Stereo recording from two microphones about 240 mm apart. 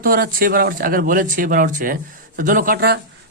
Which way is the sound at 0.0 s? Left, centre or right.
Right.